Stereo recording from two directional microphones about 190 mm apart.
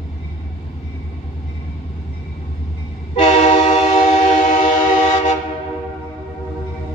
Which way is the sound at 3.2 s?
35° left (ahead or behind).